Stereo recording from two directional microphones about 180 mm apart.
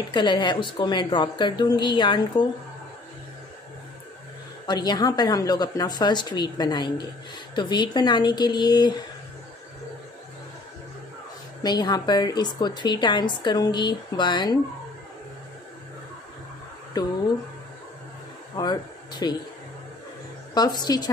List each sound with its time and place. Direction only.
0.1 s a woman's voice: 25° left (ahead or behind)
4.6 s a woman's voice: 25° left (ahead or behind)
11.6 s a woman's voice: 25° left (ahead or behind)
17.0 s a woman's voice: 20° left (ahead or behind)
18.6 s speech: 25° left (ahead or behind)
20.5 s a woman's voice: 20° left (ahead or behind)